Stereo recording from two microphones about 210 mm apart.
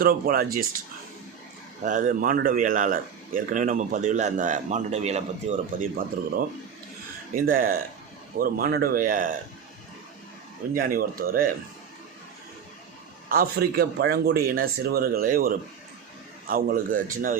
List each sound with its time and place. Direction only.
0.0 s speech: 45° right (ahead or behind)
1.8 s speech: 40° right (ahead or behind)
10.8 s speech: 45° right (ahead or behind)
13.2 s speech: 45° right (ahead or behind)